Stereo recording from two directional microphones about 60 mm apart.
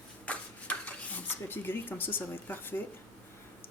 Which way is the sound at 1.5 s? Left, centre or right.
Left.